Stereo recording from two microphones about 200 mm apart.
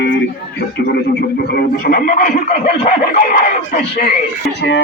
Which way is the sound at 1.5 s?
50° left (ahead or behind).